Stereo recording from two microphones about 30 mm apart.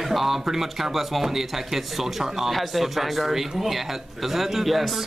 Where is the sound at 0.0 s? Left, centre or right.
Centre.